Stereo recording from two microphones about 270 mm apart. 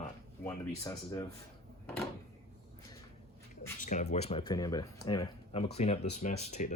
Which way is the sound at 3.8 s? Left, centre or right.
Left.